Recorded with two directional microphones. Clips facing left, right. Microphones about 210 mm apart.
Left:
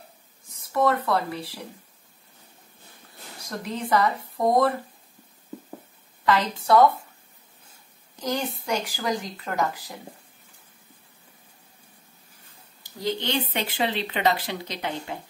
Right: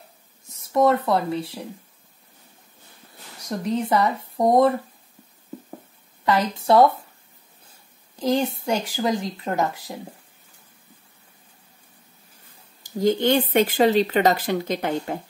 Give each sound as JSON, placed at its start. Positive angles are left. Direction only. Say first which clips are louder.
{"t": 0.5, "sound": "speech", "louder": "right 4 dB", "side_deg": -25}
{"t": 3.4, "sound": "a woman's voice", "louder": "right 6 dB", "side_deg": -20}
{"t": 6.2, "sound": "a woman's voice", "louder": "right 2 dB", "side_deg": -25}
{"t": 8.2, "sound": "a woman's voice", "louder": "right 6 dB", "side_deg": -25}
{"t": 12.8, "sound": "speech", "louder": "right 9 dB", "side_deg": -50}